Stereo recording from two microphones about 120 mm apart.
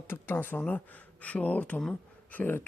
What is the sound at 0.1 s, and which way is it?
Speech, 15° left (ahead or behind).